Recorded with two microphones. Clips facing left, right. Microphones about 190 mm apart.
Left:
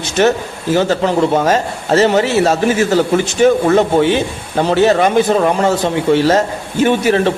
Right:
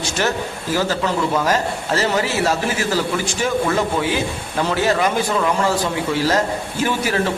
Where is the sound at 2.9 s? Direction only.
60° left (ahead or behind).